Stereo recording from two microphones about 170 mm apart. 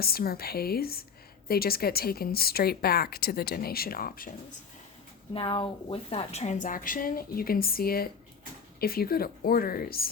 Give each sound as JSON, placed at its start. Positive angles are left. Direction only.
{"t": 0.0, "sound": "a woman's voice", "side_deg": 65}
{"t": 5.3, "sound": "a woman's voice", "side_deg": 30}